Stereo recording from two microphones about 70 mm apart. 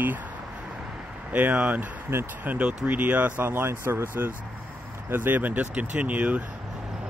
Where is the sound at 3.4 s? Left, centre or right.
Right.